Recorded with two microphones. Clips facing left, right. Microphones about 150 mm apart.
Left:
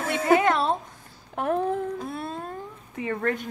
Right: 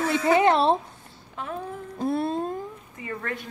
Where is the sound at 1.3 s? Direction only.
60° left (ahead or behind).